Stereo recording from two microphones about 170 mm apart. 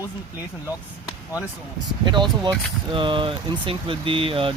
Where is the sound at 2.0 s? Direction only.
25° right (ahead or behind).